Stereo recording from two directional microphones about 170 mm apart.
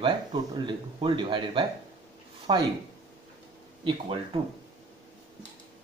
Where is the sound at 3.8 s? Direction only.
30° right (ahead or behind).